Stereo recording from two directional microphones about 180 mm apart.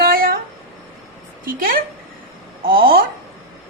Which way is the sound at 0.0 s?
55° right (ahead or behind).